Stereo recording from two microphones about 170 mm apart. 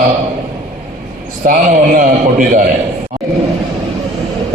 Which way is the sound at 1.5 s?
55° right (ahead or behind).